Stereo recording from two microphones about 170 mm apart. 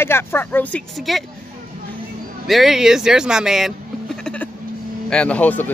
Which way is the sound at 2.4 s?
Centre (ahead or behind).